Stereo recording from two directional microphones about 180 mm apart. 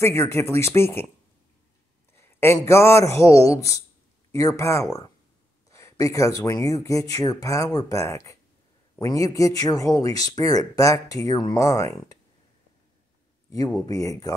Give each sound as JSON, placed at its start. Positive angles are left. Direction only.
{"t": 0.0, "sound": "speech", "side_deg": 15}
{"t": 2.1, "sound": "speech", "side_deg": 15}
{"t": 13.7, "sound": "speech", "side_deg": 20}